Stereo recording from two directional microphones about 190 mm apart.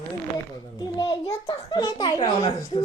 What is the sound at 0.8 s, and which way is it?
A child's voice, 20° left (ahead or behind).